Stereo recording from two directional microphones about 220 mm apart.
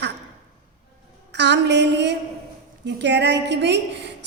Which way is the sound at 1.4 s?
50° right (ahead or behind).